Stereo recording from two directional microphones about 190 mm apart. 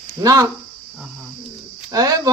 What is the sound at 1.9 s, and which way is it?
Speech, 20° right (ahead or behind).